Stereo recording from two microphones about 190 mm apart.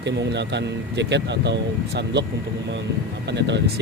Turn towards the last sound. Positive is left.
turn(degrees=-65)  # may be behind; listen again after turning